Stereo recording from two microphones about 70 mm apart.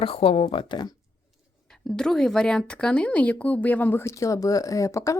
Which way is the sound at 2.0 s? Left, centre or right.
Centre.